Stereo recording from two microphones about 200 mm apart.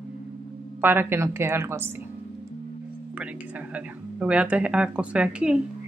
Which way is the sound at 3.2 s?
5° right (ahead or behind).